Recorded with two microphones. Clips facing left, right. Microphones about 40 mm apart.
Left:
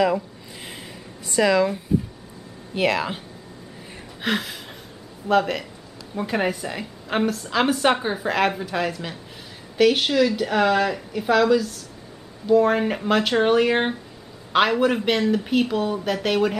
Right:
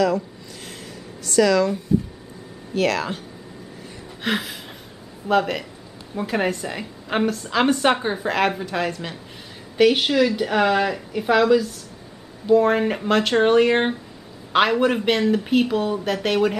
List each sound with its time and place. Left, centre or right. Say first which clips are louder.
1.2 s speech: right 1 dB; centre
4.2 s a woman's voice: even; centre